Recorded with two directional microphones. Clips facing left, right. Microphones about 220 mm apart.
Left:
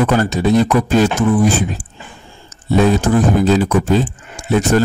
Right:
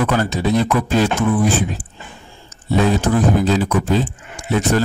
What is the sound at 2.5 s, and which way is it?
Speech, 45° left (ahead or behind).